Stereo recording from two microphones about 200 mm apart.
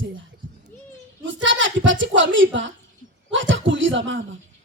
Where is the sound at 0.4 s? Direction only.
70° right (ahead or behind).